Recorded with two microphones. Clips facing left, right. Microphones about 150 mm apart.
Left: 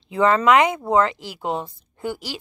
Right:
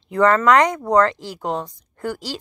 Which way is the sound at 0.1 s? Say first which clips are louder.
Right 1 dB; 20° left (ahead or behind).